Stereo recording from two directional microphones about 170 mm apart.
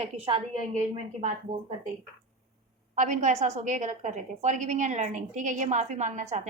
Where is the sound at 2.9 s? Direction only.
50° right (ahead or behind).